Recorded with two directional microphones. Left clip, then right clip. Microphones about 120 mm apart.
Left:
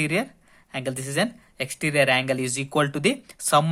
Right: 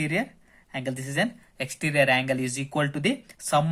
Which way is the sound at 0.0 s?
40° left (ahead or behind).